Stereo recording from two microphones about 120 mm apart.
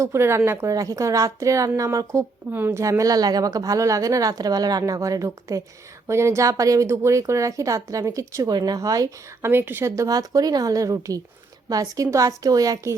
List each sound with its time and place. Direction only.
0.0 s a woman's voice: 20° right (ahead or behind)
9.5 s a woman's voice: 20° right (ahead or behind)